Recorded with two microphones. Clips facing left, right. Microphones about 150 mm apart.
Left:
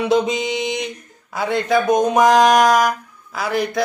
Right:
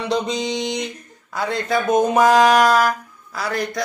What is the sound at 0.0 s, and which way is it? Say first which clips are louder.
Mantra: left 4 dB; 5° left (ahead or behind).